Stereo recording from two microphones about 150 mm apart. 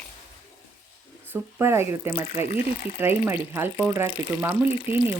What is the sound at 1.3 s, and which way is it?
Speech, 15° right (ahead or behind).